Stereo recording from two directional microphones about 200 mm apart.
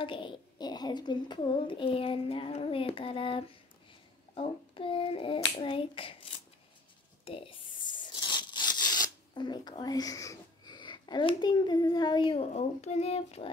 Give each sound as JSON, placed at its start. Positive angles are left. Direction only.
{"t": 0.0, "sound": "a child's voice", "side_deg": 25}
{"t": 7.2, "sound": "tearing", "side_deg": 25}